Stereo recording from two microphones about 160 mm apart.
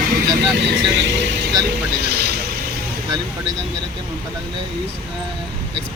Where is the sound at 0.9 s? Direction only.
90° right.